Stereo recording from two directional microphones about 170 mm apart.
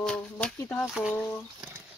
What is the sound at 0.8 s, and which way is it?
Speech, 5° right (ahead or behind).